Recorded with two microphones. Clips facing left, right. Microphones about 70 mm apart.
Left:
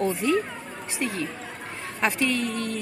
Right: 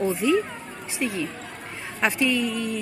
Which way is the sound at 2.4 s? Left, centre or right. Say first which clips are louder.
Right 2 dB; left.